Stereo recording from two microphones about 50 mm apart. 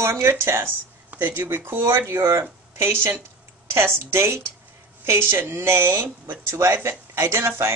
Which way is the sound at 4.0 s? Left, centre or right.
Right.